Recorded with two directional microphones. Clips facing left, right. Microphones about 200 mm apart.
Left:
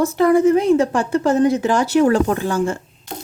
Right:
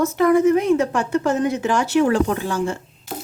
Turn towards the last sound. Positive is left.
turn(degrees=-5)  # may be behind; listen again after turning